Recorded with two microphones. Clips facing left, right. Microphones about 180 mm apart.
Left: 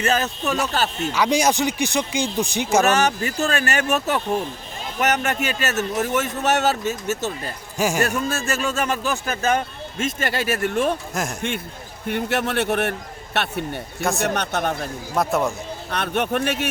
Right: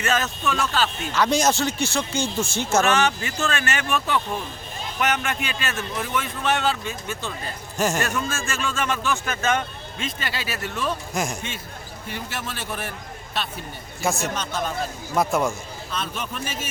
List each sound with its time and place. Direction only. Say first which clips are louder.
0.0 s a man's voice: left 2 dB; 35° left (ahead or behind)
1.1 s speech: left 1 dB; 10° left (ahead or behind)
2.8 s a man's voice: left 2 dB; 40° left (ahead or behind)
7.8 s speech: left 2 dB; 10° left (ahead or behind)
8.0 s speech: left 4 dB; 40° left (ahead or behind)
11.1 s a man's voice: even; centre (ahead or behind)
12.0 s a man's voice: left 10 dB; 60° left (ahead or behind)
15.1 s a man's voice: left 1 dB; centre (ahead or behind)
15.9 s a man's voice: left 9 dB; 65° left (ahead or behind)